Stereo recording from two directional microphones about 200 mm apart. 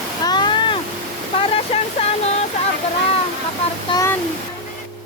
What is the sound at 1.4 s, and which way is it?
Waterfall, 30° left (ahead or behind).